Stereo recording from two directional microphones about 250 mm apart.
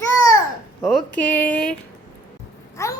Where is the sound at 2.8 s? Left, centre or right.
Centre.